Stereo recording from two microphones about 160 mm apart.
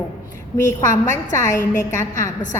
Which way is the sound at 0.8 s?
50° left (ahead or behind).